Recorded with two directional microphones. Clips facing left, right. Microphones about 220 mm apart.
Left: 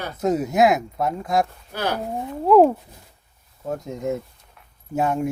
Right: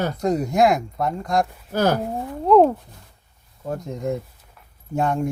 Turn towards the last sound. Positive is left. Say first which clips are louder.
# even
turn(degrees=5)  # may be behind; listen again after turning